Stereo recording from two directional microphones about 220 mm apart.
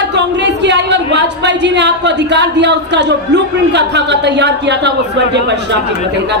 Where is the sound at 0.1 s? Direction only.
50° right (ahead or behind).